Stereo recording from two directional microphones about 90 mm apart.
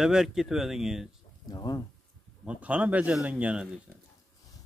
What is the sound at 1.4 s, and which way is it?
Speech, 50° left (ahead or behind).